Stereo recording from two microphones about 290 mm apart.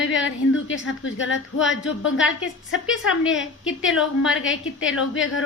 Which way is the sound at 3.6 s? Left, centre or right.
Left.